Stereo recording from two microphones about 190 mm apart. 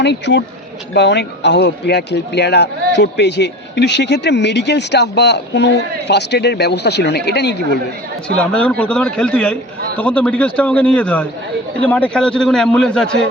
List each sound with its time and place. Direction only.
0.0 s a man's voice: 65° left (ahead or behind)
8.4 s a man's voice: 5° left (ahead or behind)